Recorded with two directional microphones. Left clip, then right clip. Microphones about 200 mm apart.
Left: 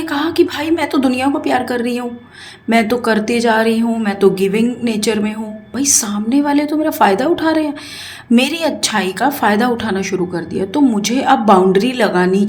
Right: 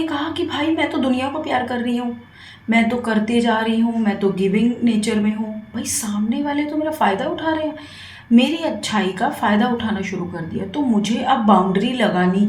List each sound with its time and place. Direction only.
0.0 s a woman's voice: 45° left (ahead or behind)